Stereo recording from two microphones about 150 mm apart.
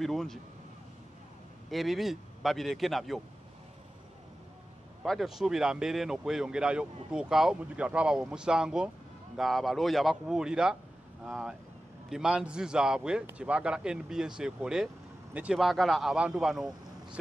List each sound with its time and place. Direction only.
0.0 s speech: centre (ahead or behind)
1.7 s speech: centre (ahead or behind)
5.0 s speech: centre (ahead or behind)